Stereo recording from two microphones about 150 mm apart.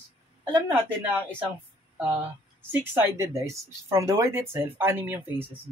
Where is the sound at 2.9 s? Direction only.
20° right (ahead or behind).